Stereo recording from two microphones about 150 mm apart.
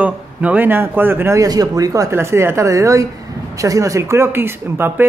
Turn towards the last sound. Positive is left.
turn(degrees=-15)  # may be behind; listen again after turning